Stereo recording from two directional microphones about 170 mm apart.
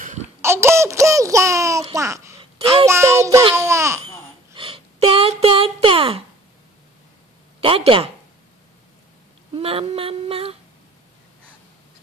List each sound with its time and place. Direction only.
0.4 s a sound: 15° right (ahead or behind)
2.0 s a child's voice: 20° right (ahead or behind)
2.9 s child singing: 15° right (ahead or behind)
4.6 s a sound: 30° right (ahead or behind)
7.6 s female singing: 30° right (ahead or behind)
9.6 s female singing: 35° right (ahead or behind)